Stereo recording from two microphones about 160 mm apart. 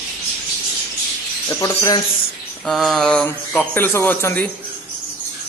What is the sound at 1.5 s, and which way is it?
Speech, 20° left (ahead or behind).